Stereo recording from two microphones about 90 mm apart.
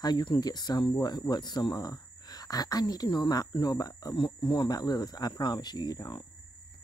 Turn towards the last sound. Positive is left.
turn(degrees=50)  # may be behind; listen again after turning